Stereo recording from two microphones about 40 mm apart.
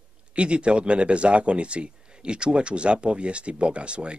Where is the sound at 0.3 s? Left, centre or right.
Right.